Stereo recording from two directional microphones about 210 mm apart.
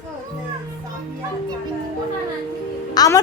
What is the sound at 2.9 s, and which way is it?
Music, 20° left (ahead or behind).